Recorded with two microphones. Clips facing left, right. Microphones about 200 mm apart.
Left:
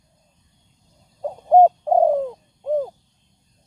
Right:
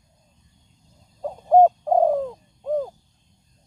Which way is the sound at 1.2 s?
10° left (ahead or behind).